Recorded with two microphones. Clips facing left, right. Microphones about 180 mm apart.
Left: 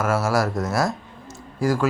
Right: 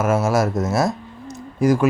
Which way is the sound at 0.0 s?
20° right (ahead or behind).